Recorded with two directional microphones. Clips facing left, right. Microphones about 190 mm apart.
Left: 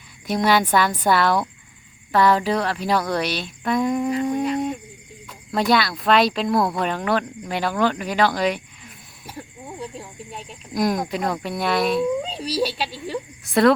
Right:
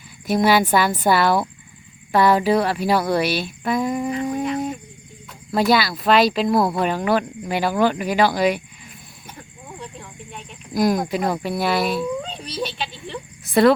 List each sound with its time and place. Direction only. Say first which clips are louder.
0.3 s speech: right 2 dB; 5° right (ahead or behind)
10.8 s speech: right 3 dB; centre (ahead or behind)
12.3 s speech: left 4 dB; 35° left (ahead or behind)
13.1 s insect: left 4 dB; centre (ahead or behind)